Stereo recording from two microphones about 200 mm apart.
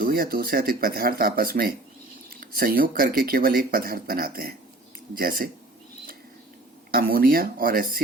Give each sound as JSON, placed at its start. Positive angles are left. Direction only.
{"t": 0.0, "sound": "speech", "side_deg": -50}
{"t": 6.9, "sound": "speech", "side_deg": -50}